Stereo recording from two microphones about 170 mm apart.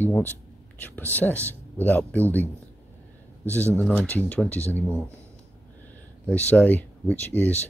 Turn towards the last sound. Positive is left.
turn(degrees=10)  # may be behind; listen again after turning